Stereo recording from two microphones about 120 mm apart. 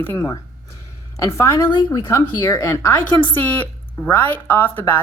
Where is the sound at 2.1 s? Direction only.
25° left (ahead or behind).